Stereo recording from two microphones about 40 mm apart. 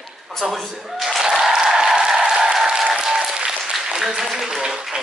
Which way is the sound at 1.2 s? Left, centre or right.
Centre.